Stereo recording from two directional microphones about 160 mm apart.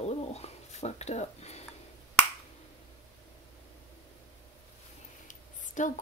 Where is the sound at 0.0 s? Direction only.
40° left (ahead or behind).